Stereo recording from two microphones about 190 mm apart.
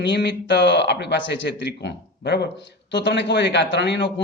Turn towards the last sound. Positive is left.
turn(degrees=65)  # may be behind; listen again after turning